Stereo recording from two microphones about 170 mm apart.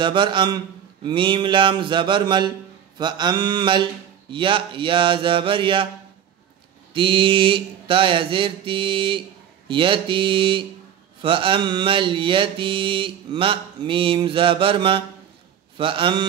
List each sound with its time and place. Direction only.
0.0 s speech: 30° right (ahead or behind)
6.9 s mantra: 30° right (ahead or behind)